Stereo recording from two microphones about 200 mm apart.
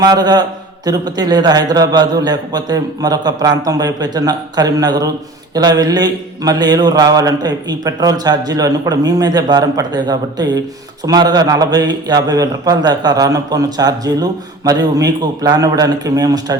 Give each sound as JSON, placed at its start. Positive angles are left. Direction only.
{"t": 0.0, "sound": "a man's voice", "side_deg": -20}